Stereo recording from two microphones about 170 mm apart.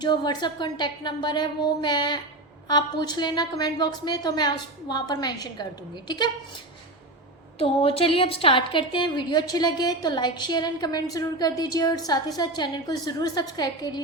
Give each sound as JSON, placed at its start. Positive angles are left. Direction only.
{"t": 0.0, "sound": "a woman's voice", "side_deg": 25}
{"t": 7.6, "sound": "a woman's voice", "side_deg": 35}